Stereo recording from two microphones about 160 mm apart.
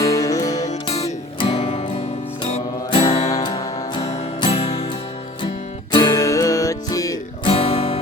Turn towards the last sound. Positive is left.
turn(degrees=35)  # may be behind; listen again after turning